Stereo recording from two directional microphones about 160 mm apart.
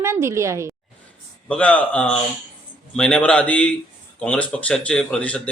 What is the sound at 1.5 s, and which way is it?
A man's voice, 10° left (ahead or behind).